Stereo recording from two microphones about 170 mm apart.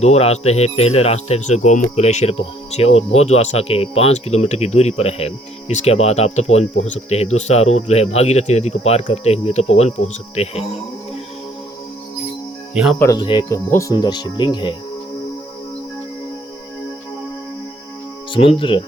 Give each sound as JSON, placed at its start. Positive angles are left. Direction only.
{"t": 0.0, "sound": "speech", "side_deg": 40}
{"t": 12.7, "sound": "speech", "side_deg": -5}
{"t": 13.1, "sound": "speech", "side_deg": 25}
{"t": 13.7, "sound": "speech", "side_deg": 15}
{"t": 18.3, "sound": "speech", "side_deg": 30}